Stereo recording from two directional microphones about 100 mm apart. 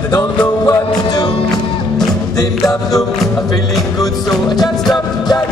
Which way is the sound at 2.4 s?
35° left (ahead or behind).